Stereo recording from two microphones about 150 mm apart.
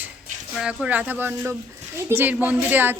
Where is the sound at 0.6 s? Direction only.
5° right (ahead or behind).